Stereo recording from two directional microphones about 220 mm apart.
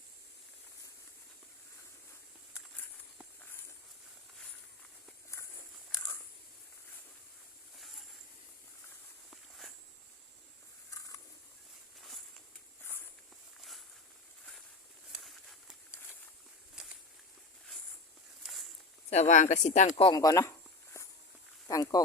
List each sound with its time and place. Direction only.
9.3 s walk: centre (ahead or behind)
15.1 s a sound: centre (ahead or behind)
18.4 s a sound: centre (ahead or behind)
19.1 s speech: 35° left (ahead or behind)
20.0 s speech: 20° left (ahead or behind)
21.7 s speech: 15° left (ahead or behind)